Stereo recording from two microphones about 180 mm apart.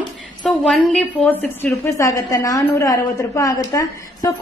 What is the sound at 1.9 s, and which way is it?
A woman's voice, 20° left (ahead or behind).